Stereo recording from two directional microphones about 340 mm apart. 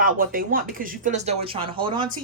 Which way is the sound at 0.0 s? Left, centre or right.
Right.